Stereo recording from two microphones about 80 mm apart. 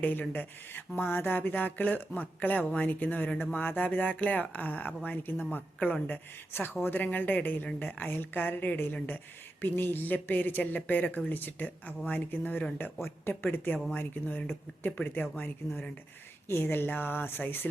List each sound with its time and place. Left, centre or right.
0.0 s speech: left